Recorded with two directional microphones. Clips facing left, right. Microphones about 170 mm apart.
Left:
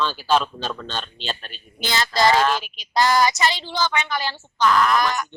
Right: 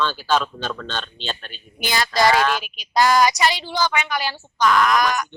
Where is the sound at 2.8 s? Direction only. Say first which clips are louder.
Right 2 dB; 15° right (ahead or behind).